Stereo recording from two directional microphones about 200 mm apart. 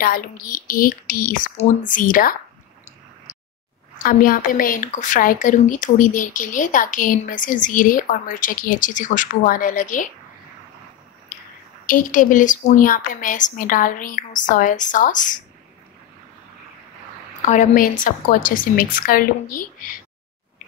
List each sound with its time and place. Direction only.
0.0 s speech: 45° left (ahead or behind)
3.3 s a sound: 35° left (ahead or behind)
4.0 s speech: 45° left (ahead or behind)
11.8 s speech: 40° left (ahead or behind)
17.5 s speech: 40° left (ahead or behind)